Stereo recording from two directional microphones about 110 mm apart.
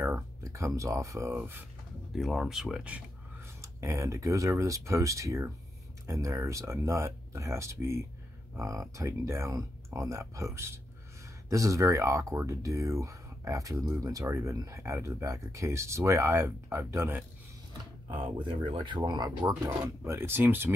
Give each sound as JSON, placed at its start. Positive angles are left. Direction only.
{"t": 0.0, "sound": "speech", "side_deg": -25}
{"t": 2.1, "sound": "speech", "side_deg": 0}
{"t": 3.6, "sound": "speech", "side_deg": -25}
{"t": 18.1, "sound": "speech", "side_deg": -45}
{"t": 20.1, "sound": "speech", "side_deg": -20}